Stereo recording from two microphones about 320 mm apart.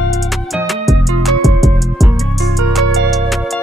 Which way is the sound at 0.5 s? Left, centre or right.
Centre.